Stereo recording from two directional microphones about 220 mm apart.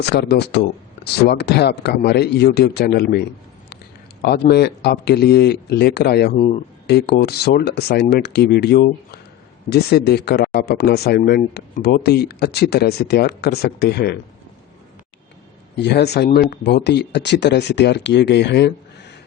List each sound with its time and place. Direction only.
0.0 s speech: 50° left (ahead or behind)
6.3 s speech: 30° left (ahead or behind)
6.8 s speech: 50° left (ahead or behind)
15.8 s speech: 50° left (ahead or behind)